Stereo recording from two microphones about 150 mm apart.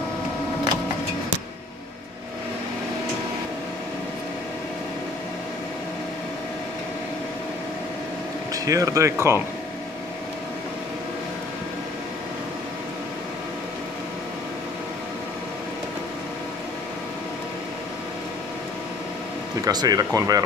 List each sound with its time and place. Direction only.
8.6 s speech: 20° right (ahead or behind)
19.6 s speech: 25° right (ahead or behind)